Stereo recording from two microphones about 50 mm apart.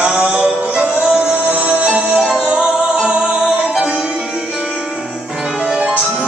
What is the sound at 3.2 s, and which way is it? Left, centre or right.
Music, centre.